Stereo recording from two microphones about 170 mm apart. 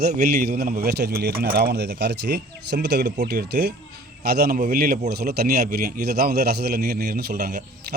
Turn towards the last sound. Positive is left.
turn(degrees=-70)  # may be behind; listen again after turning